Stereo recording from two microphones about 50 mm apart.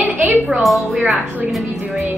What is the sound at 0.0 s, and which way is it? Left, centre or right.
Music, right.